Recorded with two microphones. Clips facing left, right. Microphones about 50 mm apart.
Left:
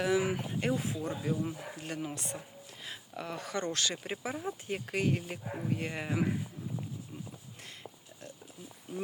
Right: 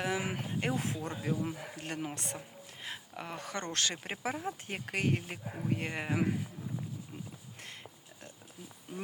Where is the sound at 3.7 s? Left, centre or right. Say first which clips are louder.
Left 1 dB; right.